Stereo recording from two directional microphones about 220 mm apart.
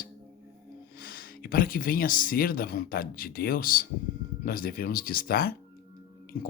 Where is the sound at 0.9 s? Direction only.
40° left (ahead or behind).